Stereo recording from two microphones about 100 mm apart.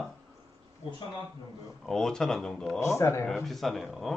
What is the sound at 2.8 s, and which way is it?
Speech, 30° left (ahead or behind).